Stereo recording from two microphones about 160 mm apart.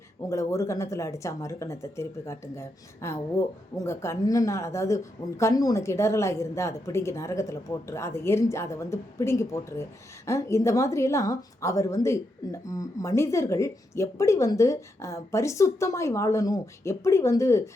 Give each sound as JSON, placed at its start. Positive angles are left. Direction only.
{"t": 0.3, "sound": "a woman's voice", "side_deg": 20}